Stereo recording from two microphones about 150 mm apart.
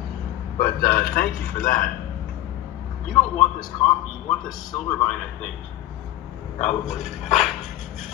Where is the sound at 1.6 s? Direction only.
65° left (ahead or behind).